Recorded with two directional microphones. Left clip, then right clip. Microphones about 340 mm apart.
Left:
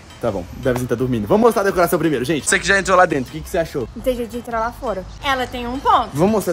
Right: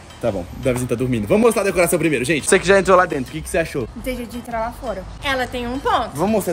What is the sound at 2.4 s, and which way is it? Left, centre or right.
Speech, centre.